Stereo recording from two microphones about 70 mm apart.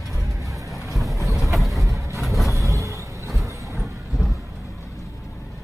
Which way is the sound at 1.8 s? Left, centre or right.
Right.